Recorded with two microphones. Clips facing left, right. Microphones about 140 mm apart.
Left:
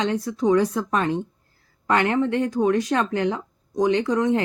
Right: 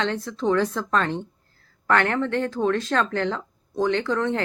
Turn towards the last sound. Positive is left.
turn(degrees=15)  # may be behind; listen again after turning